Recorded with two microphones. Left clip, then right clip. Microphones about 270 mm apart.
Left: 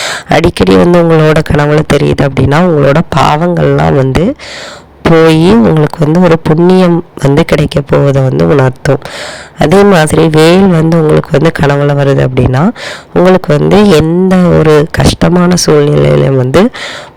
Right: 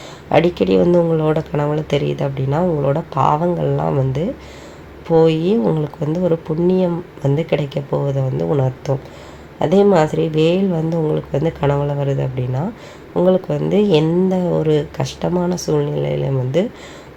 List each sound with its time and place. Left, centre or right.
0.0 s speech: left